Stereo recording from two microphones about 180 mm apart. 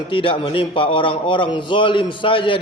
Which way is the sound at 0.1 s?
30° left (ahead or behind).